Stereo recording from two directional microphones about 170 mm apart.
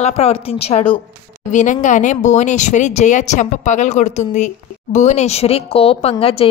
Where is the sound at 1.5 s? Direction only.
45° left (ahead or behind).